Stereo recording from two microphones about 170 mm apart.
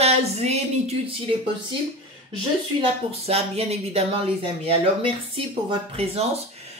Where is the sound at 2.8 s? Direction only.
35° right (ahead or behind).